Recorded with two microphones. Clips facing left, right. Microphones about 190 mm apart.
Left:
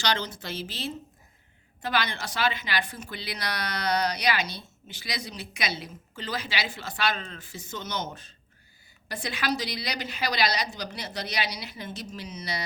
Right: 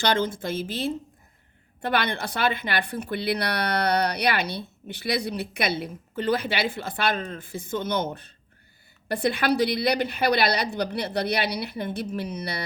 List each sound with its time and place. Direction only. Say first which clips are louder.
0.0 s a woman's voice: right 6 dB; 50° right (ahead or behind)